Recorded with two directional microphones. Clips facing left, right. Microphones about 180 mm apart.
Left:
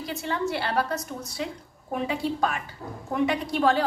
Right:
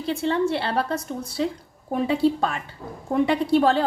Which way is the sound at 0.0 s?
30° right (ahead or behind).